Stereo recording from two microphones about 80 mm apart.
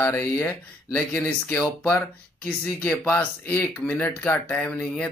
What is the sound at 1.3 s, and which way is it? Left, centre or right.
Speech, centre.